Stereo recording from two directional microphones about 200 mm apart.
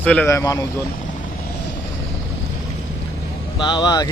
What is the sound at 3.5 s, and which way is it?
Speech, 25° left (ahead or behind).